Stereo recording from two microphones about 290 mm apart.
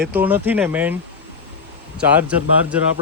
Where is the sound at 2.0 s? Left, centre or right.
Centre.